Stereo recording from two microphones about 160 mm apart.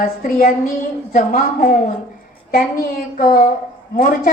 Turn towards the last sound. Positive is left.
turn(degrees=60)  # may be behind; listen again after turning